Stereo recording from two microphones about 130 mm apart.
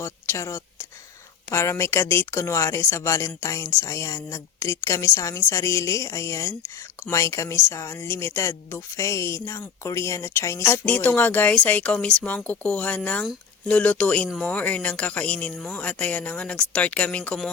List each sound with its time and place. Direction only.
0.0 s a woman's voice: 20° left (ahead or behind)